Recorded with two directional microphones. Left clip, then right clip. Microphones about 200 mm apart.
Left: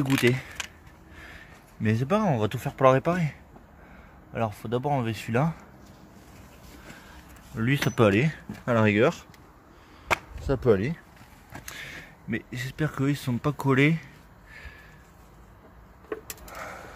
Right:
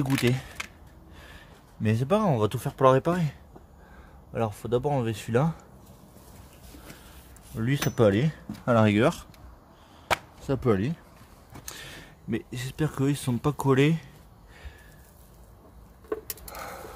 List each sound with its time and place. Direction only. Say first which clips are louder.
0.2 s speech: left 3 dB; 10° right (ahead or behind)
7.5 s speech: left 2 dB; 10° right (ahead or behind)
8.6 s speech: even; 25° right (ahead or behind)
10.4 s speech: left 3 dB; 15° right (ahead or behind)
16.1 s a sound: right 2 dB; 20° right (ahead or behind)